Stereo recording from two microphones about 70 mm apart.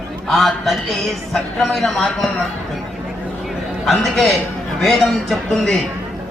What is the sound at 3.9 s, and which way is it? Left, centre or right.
A man's voice, centre.